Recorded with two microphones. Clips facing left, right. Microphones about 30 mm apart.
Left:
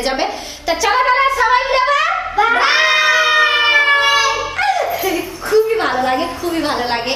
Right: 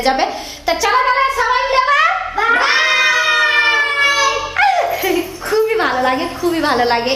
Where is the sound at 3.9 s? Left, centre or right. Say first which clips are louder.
Left 1 dB; centre.